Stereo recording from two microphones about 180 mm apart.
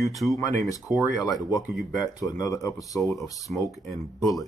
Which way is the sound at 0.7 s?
20° left (ahead or behind).